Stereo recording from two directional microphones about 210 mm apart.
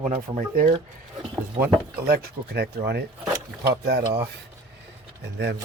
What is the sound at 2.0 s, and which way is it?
Speech, 45° right (ahead or behind).